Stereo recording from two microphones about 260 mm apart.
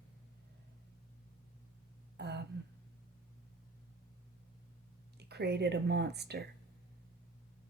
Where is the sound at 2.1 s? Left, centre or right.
Right.